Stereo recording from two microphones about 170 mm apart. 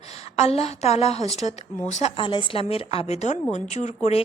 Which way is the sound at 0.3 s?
40° left (ahead or behind).